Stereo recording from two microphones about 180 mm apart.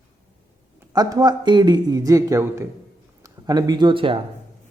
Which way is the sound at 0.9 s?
20° right (ahead or behind).